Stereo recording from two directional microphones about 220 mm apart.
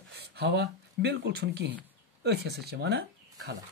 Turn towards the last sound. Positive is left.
turn(degrees=-50)  # may be behind; listen again after turning